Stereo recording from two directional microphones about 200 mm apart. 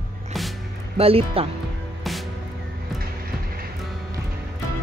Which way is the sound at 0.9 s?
30° right (ahead or behind).